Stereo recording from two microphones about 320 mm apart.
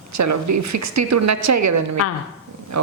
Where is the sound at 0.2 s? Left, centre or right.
Right.